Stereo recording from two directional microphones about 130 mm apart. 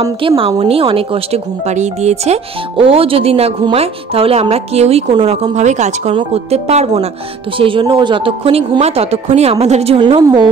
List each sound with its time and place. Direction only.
0.4 s a woman's voice: 45° right (ahead or behind)
7.5 s a woman's voice: 40° right (ahead or behind)
9.9 s a woman's voice: 40° right (ahead or behind)
10.2 s a woman's voice: 30° right (ahead or behind)